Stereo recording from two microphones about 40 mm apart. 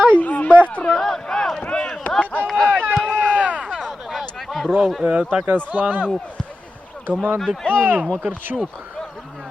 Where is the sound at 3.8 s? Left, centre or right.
Centre.